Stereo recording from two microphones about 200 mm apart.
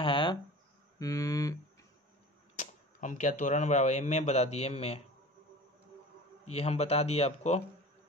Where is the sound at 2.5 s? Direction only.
35° left (ahead or behind).